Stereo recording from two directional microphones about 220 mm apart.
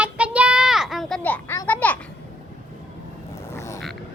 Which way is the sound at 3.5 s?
15° left (ahead or behind).